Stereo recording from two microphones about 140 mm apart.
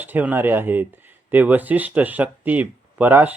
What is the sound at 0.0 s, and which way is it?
Speech, 10° right (ahead or behind).